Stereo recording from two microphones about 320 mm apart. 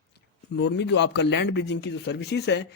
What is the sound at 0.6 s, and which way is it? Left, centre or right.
A man's voice, left.